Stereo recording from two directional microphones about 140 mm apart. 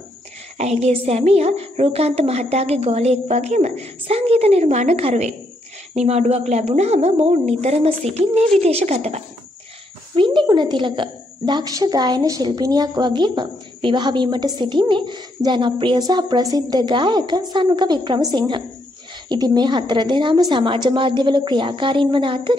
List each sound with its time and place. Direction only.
0.6 s a woman's voice: 50° right (ahead or behind)
10.1 s a woman's voice: 35° right (ahead or behind)